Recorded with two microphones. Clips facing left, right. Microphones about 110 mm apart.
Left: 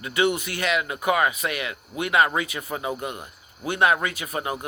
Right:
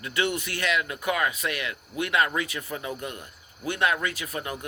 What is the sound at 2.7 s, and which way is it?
Speech, 90° left.